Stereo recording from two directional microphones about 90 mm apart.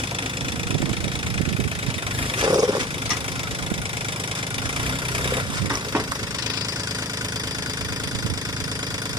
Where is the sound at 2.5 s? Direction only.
45° right (ahead or behind).